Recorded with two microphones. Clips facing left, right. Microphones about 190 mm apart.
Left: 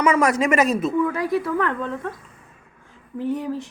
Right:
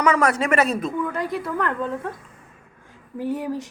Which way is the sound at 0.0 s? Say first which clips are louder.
Left 1 dB; 10° left (ahead or behind).